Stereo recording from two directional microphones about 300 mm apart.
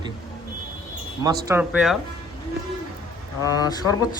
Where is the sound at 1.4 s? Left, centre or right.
Centre.